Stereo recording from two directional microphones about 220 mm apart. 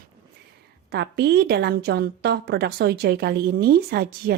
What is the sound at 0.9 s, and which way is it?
A woman's voice, 50° right (ahead or behind).